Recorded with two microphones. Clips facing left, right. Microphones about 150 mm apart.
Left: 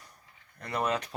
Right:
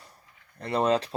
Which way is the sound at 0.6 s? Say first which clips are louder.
Right 6 dB; 30° right (ahead or behind).